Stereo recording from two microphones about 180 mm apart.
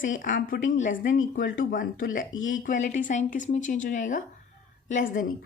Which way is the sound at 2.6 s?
45° left (ahead or behind).